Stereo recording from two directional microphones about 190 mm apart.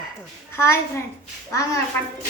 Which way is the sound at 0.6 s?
15° left (ahead or behind).